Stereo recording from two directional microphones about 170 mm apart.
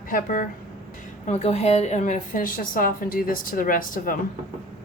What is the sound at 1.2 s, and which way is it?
A woman's voice, 40° left (ahead or behind).